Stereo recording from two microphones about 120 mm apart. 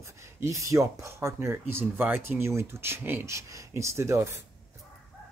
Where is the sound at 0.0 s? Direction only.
25° right (ahead or behind).